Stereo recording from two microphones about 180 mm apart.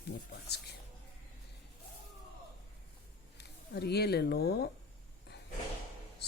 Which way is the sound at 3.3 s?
65° left (ahead or behind).